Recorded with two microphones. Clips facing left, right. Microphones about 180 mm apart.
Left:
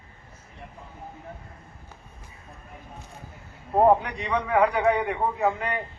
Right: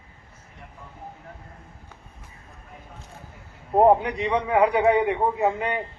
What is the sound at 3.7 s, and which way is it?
A man's voice, 25° right (ahead or behind).